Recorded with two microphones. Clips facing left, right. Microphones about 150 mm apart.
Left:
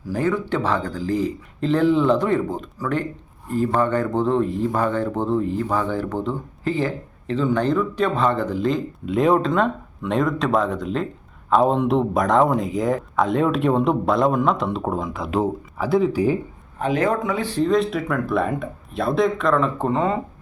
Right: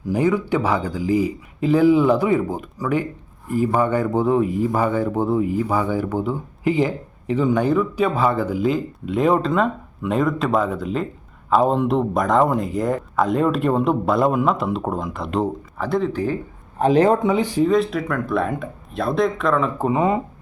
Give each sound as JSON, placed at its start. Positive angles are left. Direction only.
{"t": 0.1, "sound": "speech", "side_deg": -15}
{"t": 16.7, "sound": "speech", "side_deg": -35}
{"t": 17.3, "sound": "speech", "side_deg": -15}